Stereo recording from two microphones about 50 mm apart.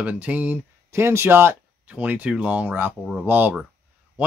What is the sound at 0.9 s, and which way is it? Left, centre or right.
Speech, right.